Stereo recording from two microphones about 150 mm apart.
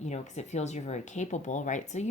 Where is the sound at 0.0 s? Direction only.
50° left (ahead or behind).